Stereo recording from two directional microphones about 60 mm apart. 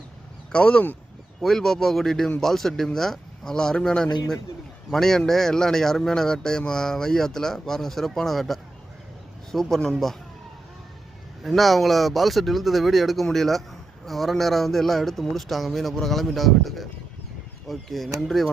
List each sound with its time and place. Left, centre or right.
0.5 s speech: centre
1.4 s a man's voice: centre
11.4 s a man's voice: centre